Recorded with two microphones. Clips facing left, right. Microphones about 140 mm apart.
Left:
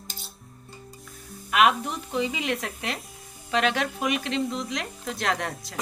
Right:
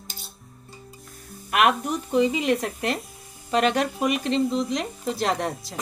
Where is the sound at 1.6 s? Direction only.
Centre (ahead or behind).